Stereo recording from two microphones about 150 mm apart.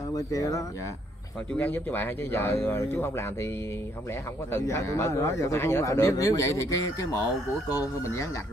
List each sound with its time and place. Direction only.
0.1 s a man's voice: 20° left (ahead or behind)
1.5 s speech: 10° left (ahead or behind)
4.5 s a man's voice: 20° left (ahead or behind)